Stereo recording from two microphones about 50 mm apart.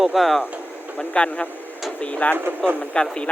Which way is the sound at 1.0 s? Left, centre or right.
Left.